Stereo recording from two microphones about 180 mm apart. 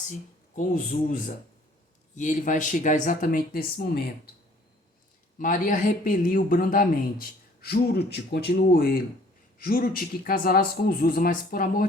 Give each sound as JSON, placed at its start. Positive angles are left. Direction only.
{"t": 0.1, "sound": "speech", "side_deg": 45}
{"t": 5.4, "sound": "speech", "side_deg": 50}